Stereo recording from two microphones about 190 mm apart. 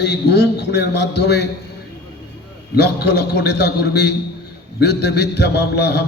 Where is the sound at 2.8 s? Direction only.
60° left (ahead or behind).